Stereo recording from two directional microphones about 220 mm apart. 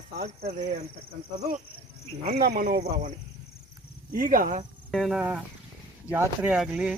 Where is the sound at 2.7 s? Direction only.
30° right (ahead or behind).